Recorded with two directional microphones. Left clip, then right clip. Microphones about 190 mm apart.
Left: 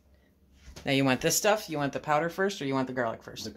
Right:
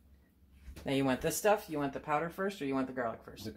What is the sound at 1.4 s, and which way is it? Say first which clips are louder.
Speech: left 4 dB; 60° left (ahead or behind).